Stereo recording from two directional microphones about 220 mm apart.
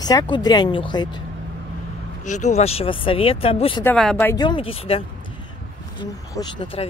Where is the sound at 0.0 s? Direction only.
20° left (ahead or behind).